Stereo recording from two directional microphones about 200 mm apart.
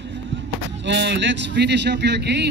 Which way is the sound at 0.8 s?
60° right (ahead or behind).